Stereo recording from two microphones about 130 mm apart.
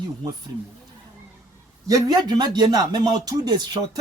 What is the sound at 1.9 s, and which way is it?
Speech, 25° right (ahead or behind).